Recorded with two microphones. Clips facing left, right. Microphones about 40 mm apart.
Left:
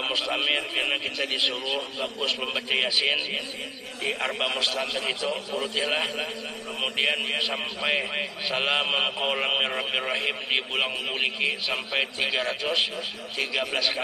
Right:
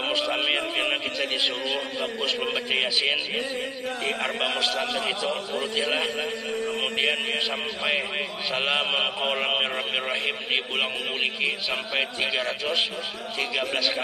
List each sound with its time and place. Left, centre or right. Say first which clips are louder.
0.0 s a man's voice: right 1 dB; centre
1.8 s a man's voice: right 2 dB; right
2.2 s a man's voice: right 1 dB; centre
4.0 s a man's voice: left 1 dB; right
5.8 s a man's voice: right 1 dB; centre
7.1 s a man's voice: right 1 dB; centre